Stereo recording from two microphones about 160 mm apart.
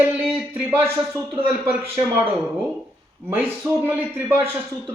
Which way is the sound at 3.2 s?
10° right (ahead or behind).